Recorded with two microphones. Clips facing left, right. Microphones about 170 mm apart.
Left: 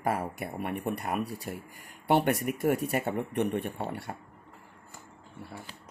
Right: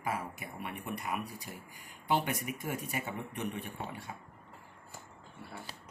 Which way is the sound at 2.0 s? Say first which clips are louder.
Left 7 dB; 65° left (ahead or behind).